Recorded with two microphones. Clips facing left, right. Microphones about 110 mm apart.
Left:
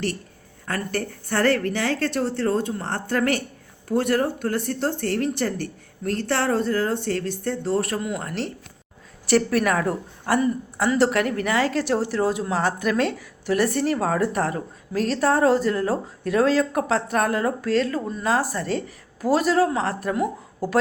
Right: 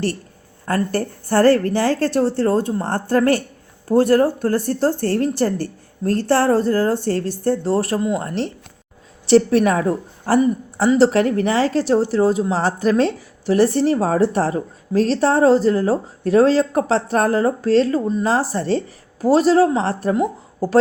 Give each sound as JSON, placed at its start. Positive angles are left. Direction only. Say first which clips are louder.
{"t": 0.7, "sound": "a woman's voice", "louder": "right 7 dB", "side_deg": -35}